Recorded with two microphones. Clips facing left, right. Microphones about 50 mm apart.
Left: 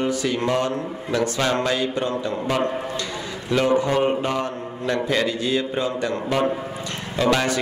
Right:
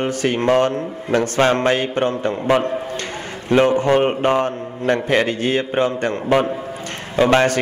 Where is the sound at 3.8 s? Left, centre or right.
Right.